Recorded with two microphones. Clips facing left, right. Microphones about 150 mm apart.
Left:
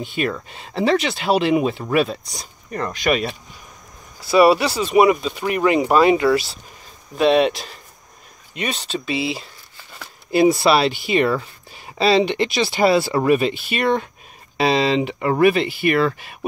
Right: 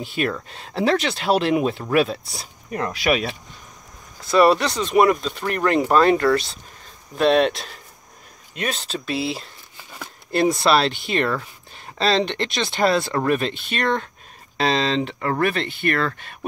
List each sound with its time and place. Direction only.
0.0 s speech: centre (ahead or behind)